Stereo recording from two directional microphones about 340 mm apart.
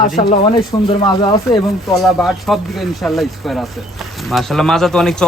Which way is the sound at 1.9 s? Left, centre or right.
Centre.